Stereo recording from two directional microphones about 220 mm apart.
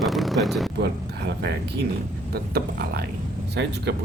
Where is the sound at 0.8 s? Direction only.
50° right (ahead or behind).